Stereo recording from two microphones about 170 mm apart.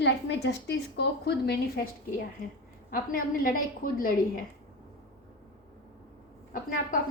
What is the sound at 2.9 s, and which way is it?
A woman's voice, 55° left (ahead or behind).